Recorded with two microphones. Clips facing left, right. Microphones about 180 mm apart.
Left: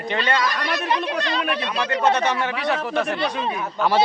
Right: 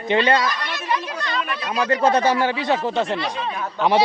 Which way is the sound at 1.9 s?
30° right (ahead or behind).